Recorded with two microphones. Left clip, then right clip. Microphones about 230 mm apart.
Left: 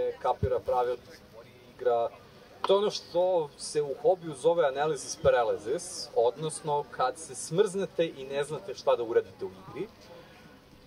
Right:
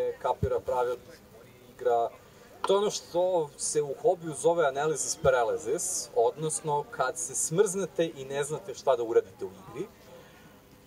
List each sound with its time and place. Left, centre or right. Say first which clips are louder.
0.0 s speech: even; right